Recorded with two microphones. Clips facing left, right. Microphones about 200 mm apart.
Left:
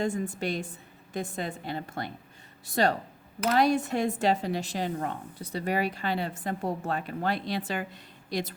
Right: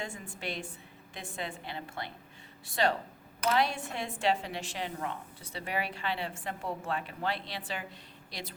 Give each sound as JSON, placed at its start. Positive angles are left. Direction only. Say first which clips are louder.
{"t": 0.0, "sound": "a woman's voice", "louder": "left 10 dB", "side_deg": 40}